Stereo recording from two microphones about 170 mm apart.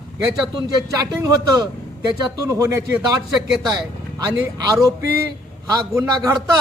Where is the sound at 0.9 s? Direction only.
20° right (ahead or behind).